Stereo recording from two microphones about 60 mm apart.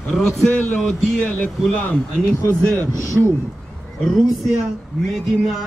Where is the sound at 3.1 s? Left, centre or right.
Centre.